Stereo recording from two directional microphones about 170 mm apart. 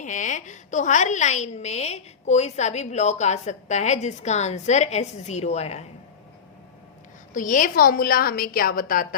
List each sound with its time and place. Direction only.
0.0 s a woman's voice: 45° left (ahead or behind)
7.3 s a woman's voice: 50° left (ahead or behind)